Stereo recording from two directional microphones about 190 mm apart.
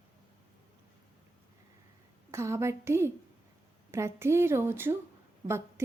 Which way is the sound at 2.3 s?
15° right (ahead or behind).